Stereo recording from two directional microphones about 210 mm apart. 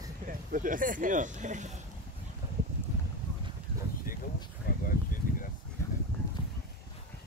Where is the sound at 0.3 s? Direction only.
40° right (ahead or behind).